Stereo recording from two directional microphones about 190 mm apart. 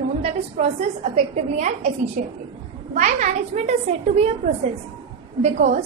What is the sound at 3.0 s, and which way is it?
Speech, 40° right (ahead or behind).